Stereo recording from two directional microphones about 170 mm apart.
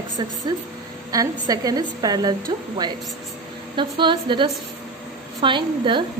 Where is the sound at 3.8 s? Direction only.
30° right (ahead or behind).